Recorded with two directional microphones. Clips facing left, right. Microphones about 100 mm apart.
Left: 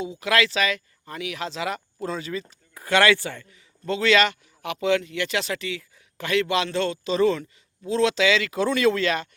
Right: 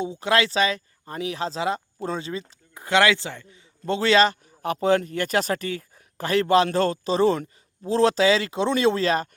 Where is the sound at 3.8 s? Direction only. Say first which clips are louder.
Right 2 dB; 35° right (ahead or behind).